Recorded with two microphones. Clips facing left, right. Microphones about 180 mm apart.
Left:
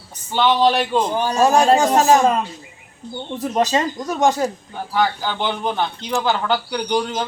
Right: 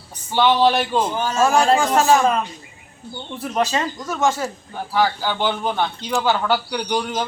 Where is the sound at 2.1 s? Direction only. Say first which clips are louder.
Left 2 dB; 20° left (ahead or behind).